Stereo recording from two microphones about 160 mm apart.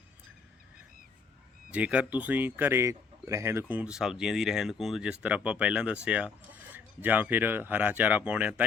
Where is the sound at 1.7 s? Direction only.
10° right (ahead or behind).